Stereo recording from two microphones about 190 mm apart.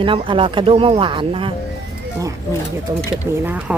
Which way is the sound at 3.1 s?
10° right (ahead or behind).